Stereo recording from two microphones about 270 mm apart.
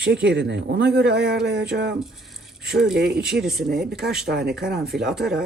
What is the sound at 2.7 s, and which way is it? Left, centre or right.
Speech, centre.